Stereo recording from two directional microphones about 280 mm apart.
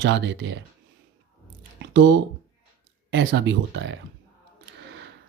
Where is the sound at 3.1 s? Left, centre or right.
Right.